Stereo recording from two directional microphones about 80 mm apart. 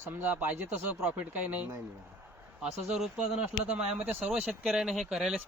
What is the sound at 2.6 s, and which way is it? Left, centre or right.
Speech, centre.